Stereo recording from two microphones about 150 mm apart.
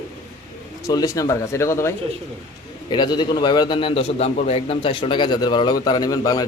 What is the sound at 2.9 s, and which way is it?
A man's voice, 30° left (ahead or behind).